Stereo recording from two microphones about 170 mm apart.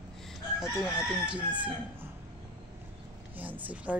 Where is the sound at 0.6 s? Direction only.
5° right (ahead or behind).